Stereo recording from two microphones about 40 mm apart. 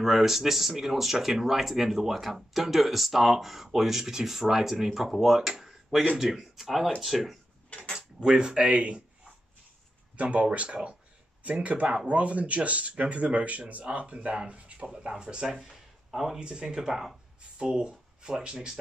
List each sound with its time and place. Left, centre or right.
0.0 s speech: centre
5.5 s a sound: centre
6.2 s speech: centre
8.2 s speech: centre
10.1 s speech: right; by 15.7 s centre
15.7 s a sound: centre
16.3 s speech: centre
17.6 s speech: right